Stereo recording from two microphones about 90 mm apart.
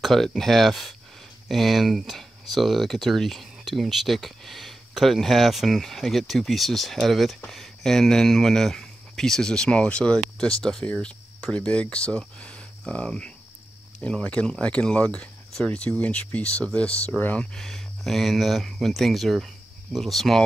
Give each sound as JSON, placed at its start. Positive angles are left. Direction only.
{"t": 0.0, "sound": "speech", "side_deg": 0}
{"t": 17.6, "sound": "speech", "side_deg": 5}